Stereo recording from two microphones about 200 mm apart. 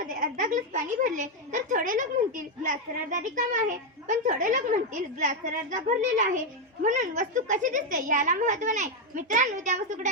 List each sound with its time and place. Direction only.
0.2 s a woman's voice: 40° right (ahead or behind)